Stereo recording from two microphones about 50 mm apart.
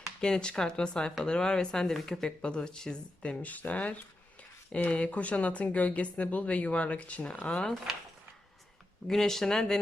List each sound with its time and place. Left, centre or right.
0.2 s speech: centre
2.4 s speech: centre
3.4 s speech: left
9.0 s speech: centre